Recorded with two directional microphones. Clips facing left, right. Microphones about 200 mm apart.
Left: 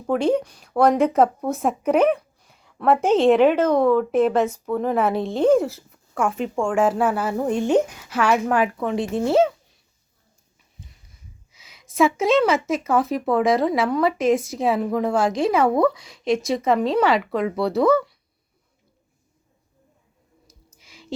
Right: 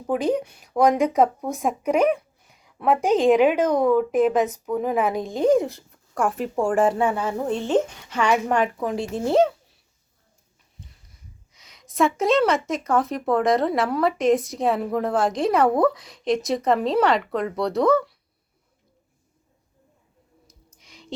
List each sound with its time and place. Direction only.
0.3 s speech: 20° right (ahead or behind)
2.0 s a sound: centre (ahead or behind)
3.1 s speech: 15° right (ahead or behind)
5.5 s a woman's voice: centre (ahead or behind)
11.5 s a woman's voice: 5° left (ahead or behind)
20.7 s music: 5° left (ahead or behind)